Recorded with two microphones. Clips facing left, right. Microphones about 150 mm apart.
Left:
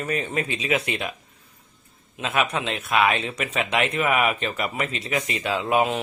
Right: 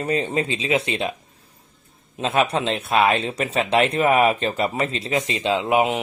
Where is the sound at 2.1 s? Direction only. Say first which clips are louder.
Right 4 dB; 35° right (ahead or behind).